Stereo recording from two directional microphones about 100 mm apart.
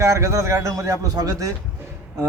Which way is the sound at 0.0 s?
30° right (ahead or behind).